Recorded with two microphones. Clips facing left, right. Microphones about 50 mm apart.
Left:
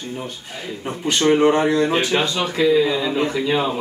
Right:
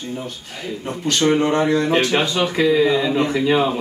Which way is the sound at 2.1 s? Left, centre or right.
Right.